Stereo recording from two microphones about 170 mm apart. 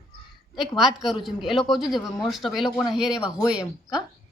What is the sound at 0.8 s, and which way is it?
A woman's voice, centre (ahead or behind).